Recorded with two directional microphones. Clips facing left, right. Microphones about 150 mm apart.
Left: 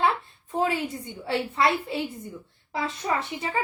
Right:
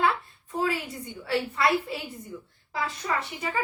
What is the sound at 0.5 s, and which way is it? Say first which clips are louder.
A woman's voice: left 3 dB; 25° left (ahead or behind).